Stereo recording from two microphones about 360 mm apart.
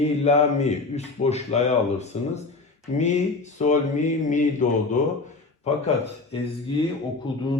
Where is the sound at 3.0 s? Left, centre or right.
Centre.